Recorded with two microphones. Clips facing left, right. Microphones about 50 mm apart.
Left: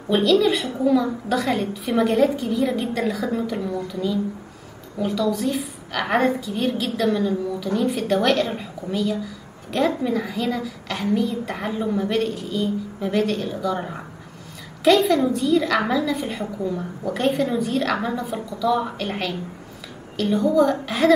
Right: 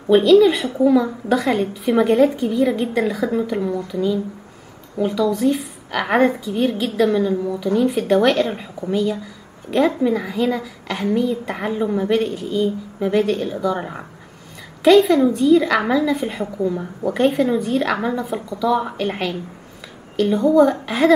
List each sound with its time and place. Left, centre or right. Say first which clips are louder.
0.1 s a woman's voice: right 6 dB; centre